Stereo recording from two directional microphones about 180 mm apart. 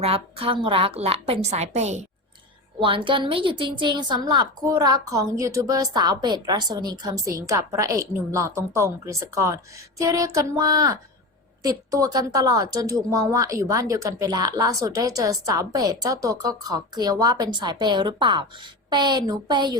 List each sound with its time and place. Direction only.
0.0 s a woman's voice: 30° right (ahead or behind)
2.8 s speech: 30° right (ahead or behind)